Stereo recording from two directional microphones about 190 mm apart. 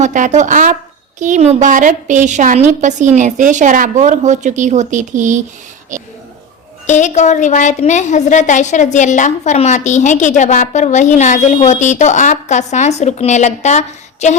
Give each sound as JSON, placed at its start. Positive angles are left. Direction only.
{"t": 0.0, "sound": "a woman's voice", "side_deg": -40}
{"t": 6.8, "sound": "a woman's voice", "side_deg": 40}